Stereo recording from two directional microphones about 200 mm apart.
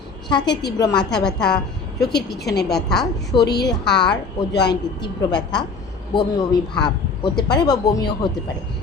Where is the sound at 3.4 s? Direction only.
55° left (ahead or behind).